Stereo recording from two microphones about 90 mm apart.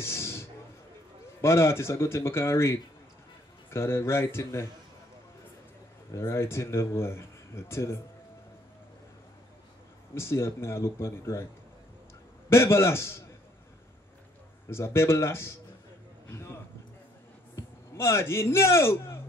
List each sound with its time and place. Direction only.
0.0 s a sound: 30° left (ahead or behind)
1.4 s speech: 30° left (ahead or behind)
6.1 s speech: 30° left (ahead or behind)
10.1 s speech: 30° left (ahead or behind)
12.4 s speech: 30° left (ahead or behind)
14.7 s speech: 30° left (ahead or behind)
17.6 s a man's voice: 30° left (ahead or behind)